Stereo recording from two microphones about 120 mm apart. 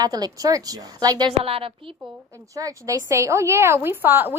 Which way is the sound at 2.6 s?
30° right (ahead or behind).